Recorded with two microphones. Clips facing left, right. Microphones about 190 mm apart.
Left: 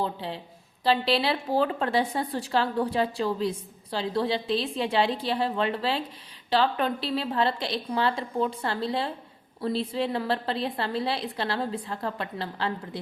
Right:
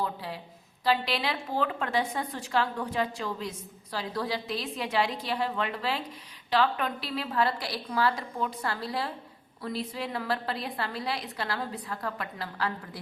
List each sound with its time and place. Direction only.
0.0 s a woman's voice: 25° left (ahead or behind)